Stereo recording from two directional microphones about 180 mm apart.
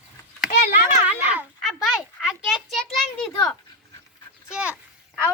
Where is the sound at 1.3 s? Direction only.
5° right (ahead or behind).